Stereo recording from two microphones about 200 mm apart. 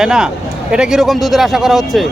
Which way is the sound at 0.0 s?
5° right (ahead or behind).